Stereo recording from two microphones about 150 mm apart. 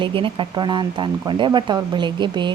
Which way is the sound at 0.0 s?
35° right (ahead or behind).